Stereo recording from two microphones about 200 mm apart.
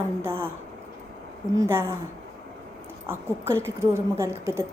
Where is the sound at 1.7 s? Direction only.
15° right (ahead or behind).